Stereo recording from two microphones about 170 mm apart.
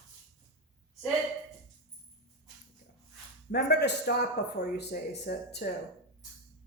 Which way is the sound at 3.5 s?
75° left (ahead or behind).